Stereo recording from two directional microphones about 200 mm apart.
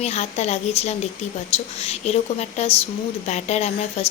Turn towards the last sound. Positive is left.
turn(degrees=35)  # may be behind; listen again after turning